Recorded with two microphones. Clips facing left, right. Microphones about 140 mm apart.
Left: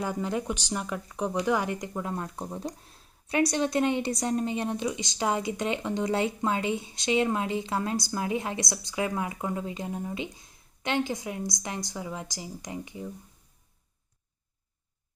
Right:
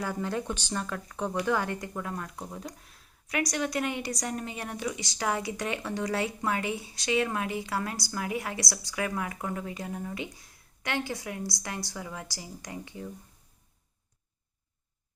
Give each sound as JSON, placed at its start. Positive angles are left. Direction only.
{"t": 0.0, "sound": "speech", "side_deg": 20}